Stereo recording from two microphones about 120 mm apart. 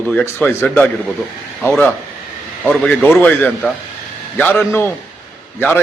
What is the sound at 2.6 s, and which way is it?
A man's voice, 15° left (ahead or behind).